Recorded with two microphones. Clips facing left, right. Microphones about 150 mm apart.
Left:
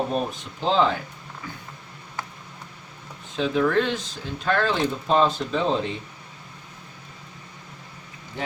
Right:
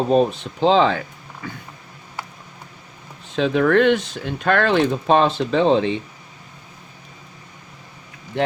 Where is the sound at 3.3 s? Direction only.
70° right (ahead or behind).